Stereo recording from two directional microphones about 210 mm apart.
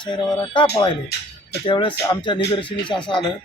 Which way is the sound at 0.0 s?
20° left (ahead or behind).